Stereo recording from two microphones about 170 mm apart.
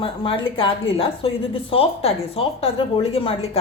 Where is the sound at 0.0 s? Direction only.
30° left (ahead or behind).